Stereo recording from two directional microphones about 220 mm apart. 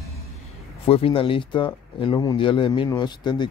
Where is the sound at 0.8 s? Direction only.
25° left (ahead or behind).